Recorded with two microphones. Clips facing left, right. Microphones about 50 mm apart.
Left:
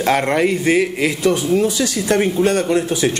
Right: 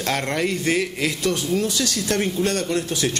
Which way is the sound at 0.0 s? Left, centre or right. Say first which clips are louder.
Left 7 dB; centre.